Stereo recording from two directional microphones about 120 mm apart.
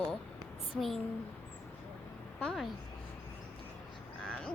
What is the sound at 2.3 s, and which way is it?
Speech, 5° left (ahead or behind).